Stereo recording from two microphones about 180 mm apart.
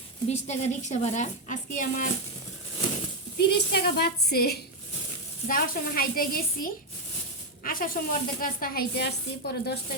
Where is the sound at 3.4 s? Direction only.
65° left (ahead or behind).